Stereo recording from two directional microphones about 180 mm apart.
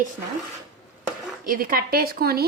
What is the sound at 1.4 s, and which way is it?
A woman's voice, 55° right (ahead or behind).